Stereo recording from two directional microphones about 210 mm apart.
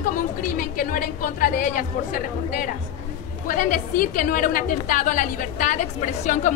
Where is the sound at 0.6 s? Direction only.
40° left (ahead or behind).